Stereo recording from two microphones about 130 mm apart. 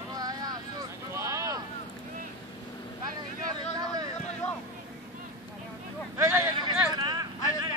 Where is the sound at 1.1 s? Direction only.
20° right (ahead or behind).